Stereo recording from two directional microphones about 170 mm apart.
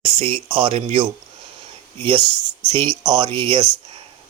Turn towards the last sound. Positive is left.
turn(degrees=-30)  # may be behind; listen again after turning